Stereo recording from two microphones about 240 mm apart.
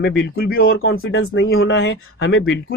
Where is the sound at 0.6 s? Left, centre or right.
Left.